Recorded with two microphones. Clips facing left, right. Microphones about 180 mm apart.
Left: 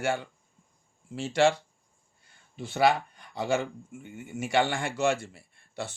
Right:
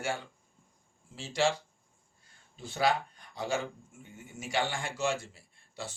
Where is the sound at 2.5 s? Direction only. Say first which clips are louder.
Left 5 dB; 65° left (ahead or behind).